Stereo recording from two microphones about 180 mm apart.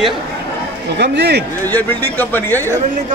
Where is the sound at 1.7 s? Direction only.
10° left (ahead or behind).